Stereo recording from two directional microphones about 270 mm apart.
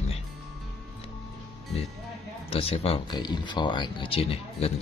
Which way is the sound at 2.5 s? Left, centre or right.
Left.